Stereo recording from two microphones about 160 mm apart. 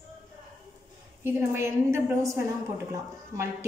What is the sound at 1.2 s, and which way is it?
A woman's voice, 15° right (ahead or behind).